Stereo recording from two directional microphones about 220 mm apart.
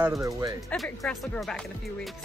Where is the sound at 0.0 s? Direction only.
15° right (ahead or behind).